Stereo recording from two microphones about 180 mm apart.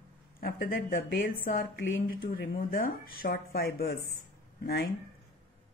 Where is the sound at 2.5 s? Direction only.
55° left (ahead or behind).